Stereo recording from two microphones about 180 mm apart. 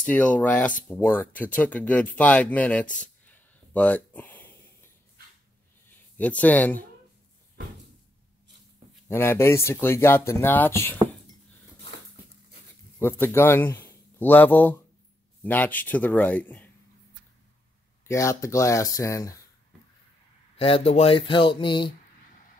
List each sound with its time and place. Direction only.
0.0 s speech: 5° left (ahead or behind)
3.0 s a sound: 10° left (ahead or behind)
6.1 s speech: 10° left (ahead or behind)
9.0 s speech: 15° left (ahead or behind)
13.0 s speech: 10° left (ahead or behind)
13.8 s a sound: 10° left (ahead or behind)
15.4 s speech: 10° left (ahead or behind)
18.0 s speech: 15° left (ahead or behind)
20.5 s speech: 30° left (ahead or behind)